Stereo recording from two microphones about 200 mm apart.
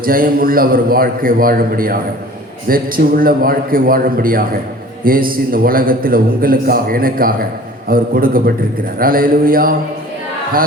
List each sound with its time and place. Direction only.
0.0 s a man's voice: 45° right (ahead or behind)